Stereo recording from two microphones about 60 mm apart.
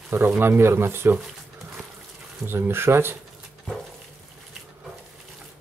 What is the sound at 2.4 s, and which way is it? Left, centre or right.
Speech, right.